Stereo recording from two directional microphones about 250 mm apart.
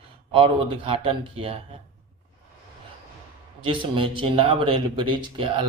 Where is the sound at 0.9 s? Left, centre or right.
Right.